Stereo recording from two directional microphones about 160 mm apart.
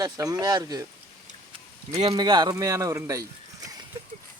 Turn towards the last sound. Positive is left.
turn(degrees=-20)  # may be behind; listen again after turning